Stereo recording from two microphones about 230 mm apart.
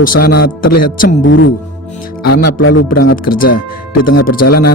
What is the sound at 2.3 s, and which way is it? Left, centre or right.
Speech, left.